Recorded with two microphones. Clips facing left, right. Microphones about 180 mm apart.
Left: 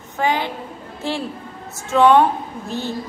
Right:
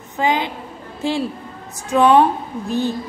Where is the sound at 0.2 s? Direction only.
20° right (ahead or behind).